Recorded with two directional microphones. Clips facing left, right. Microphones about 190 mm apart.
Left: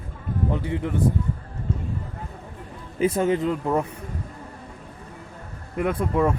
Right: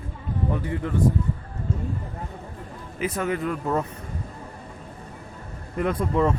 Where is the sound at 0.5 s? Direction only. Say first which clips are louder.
Left 1 dB; 20° left (ahead or behind).